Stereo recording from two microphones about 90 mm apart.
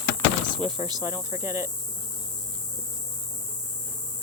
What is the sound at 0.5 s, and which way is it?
Speech, 60° right (ahead or behind).